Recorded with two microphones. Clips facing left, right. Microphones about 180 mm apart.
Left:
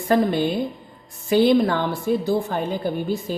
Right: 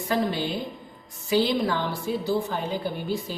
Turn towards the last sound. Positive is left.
turn(degrees=50)  # may be behind; listen again after turning